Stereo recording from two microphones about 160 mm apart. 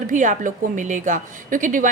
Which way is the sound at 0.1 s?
55° right (ahead or behind).